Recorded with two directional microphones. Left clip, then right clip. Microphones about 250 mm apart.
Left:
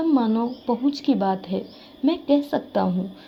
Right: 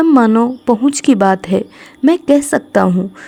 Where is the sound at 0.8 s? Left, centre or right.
Right.